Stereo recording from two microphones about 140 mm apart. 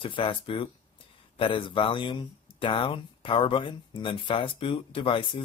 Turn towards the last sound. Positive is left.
turn(degrees=40)  # may be behind; listen again after turning